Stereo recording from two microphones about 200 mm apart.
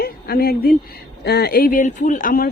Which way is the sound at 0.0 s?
50° left (ahead or behind).